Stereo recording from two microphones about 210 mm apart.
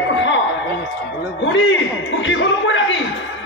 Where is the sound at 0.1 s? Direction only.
60° left (ahead or behind).